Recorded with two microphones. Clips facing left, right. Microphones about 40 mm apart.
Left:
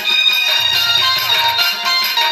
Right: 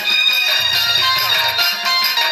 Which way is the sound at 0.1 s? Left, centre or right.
Left.